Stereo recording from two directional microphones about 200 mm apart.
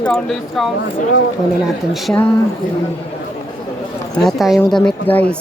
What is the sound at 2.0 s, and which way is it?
Speech, 5° left (ahead or behind).